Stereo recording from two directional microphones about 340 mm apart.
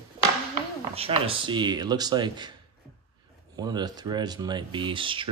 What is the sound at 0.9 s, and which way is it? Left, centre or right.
Speech, centre.